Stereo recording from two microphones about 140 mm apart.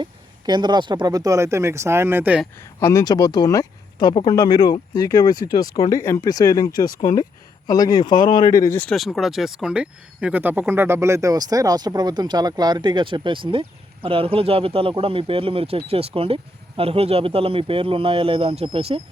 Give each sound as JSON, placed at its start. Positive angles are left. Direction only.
{"t": 0.0, "sound": "speech", "side_deg": -30}
{"t": 2.8, "sound": "speech", "side_deg": 25}
{"t": 8.8, "sound": "speech", "side_deg": 0}